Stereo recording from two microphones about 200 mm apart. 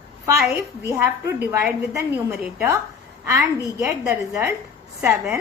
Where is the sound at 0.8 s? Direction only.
15° right (ahead or behind).